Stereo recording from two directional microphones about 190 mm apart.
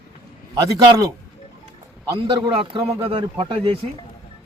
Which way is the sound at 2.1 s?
20° right (ahead or behind).